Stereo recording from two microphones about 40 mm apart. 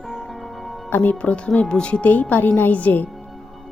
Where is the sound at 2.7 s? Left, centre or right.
Left.